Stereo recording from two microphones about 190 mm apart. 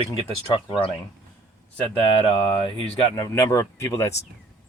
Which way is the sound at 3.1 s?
15° left (ahead or behind).